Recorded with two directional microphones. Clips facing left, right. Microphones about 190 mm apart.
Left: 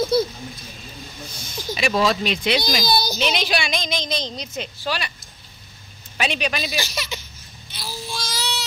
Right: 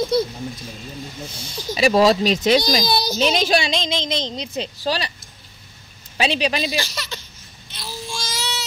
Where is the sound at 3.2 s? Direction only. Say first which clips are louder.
Right 4 dB; 45° right (ahead or behind).